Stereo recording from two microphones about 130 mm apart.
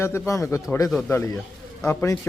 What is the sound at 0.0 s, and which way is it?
Speech, 20° left (ahead or behind).